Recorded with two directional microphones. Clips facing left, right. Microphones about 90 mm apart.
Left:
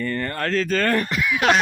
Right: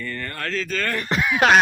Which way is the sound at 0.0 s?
35° left (ahead or behind).